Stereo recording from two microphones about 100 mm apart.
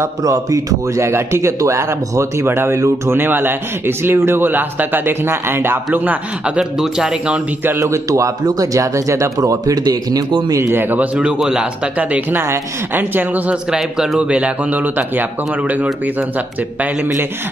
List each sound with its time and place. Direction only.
0.0 s speech: 35° right (ahead or behind); by 7.3 s 5° right (ahead or behind)
7.8 s speech: 30° right (ahead or behind); by 15.2 s 15° right (ahead or behind)